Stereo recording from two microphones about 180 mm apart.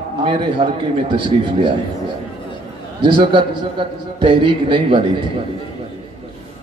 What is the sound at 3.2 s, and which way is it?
A man's voice, 25° right (ahead or behind).